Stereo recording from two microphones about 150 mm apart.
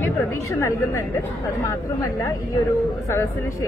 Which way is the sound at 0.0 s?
20° left (ahead or behind).